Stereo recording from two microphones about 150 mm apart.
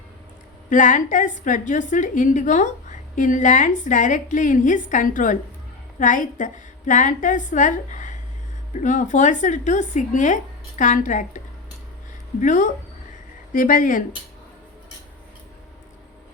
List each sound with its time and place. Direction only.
0.7 s a woman's voice: 60° left (ahead or behind)